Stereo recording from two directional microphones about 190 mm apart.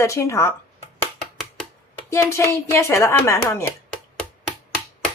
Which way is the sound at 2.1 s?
15° left (ahead or behind).